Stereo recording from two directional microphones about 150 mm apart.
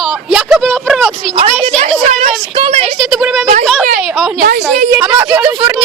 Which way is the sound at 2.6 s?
35° right (ahead or behind).